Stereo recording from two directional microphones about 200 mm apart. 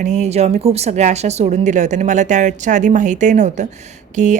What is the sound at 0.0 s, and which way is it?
A woman's voice, 35° right (ahead or behind).